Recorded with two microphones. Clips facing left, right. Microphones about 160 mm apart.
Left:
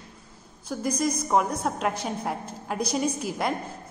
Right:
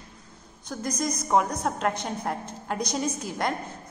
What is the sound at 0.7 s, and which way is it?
A woman's voice, 5° left (ahead or behind).